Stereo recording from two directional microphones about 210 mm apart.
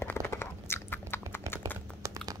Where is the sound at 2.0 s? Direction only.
15° right (ahead or behind).